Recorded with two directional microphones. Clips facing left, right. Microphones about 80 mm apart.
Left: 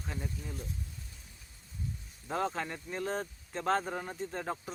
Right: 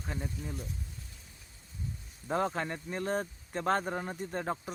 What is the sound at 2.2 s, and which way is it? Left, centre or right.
Speech, centre.